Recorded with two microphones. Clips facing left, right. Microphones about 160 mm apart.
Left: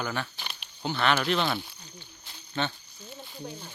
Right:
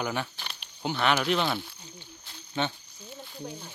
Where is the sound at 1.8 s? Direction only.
20° right (ahead or behind).